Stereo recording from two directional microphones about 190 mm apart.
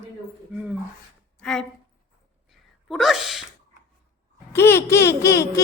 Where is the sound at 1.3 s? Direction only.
5° left (ahead or behind).